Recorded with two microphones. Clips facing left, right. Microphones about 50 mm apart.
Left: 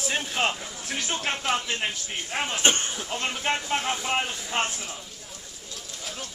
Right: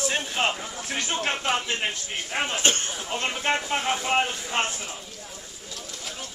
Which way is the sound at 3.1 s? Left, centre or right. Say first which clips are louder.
Right 2 dB; centre.